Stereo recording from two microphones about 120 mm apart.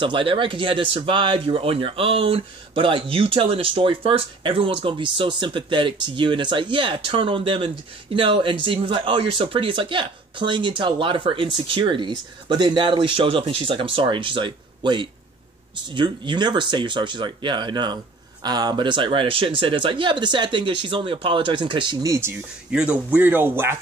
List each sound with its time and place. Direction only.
0.0 s speech: 45° right (ahead or behind)
22.0 s speech: 25° right (ahead or behind)
22.7 s speech: 10° right (ahead or behind)